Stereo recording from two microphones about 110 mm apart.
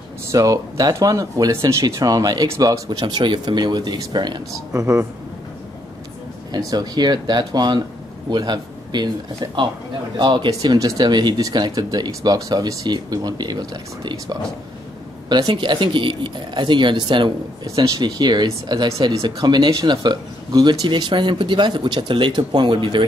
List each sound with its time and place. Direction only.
0.3 s speech: 30° right (ahead or behind)
2.9 s speech: 45° right (ahead or behind)
4.7 s speech: 25° right (ahead or behind)
6.7 s speech: 40° right (ahead or behind)
15.2 s speech: 45° right (ahead or behind)
17.6 s speech: 35° right (ahead or behind)